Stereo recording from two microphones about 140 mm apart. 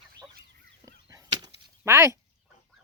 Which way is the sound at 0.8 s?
25° right (ahead or behind).